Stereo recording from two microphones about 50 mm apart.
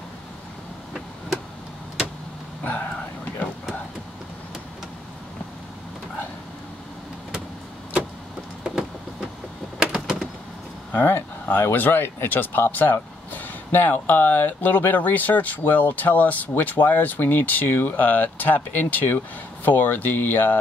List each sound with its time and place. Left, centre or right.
2.6 s speech: left
8.6 s vehicle: centre
9.8 s a sound: centre
10.9 s speech: left